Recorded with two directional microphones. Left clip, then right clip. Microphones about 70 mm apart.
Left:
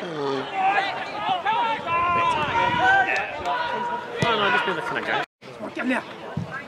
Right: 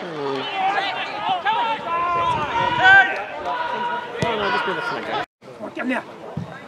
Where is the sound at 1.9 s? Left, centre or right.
Centre.